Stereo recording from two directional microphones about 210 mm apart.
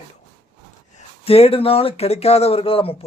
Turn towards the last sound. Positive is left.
turn(degrees=25)  # may be behind; listen again after turning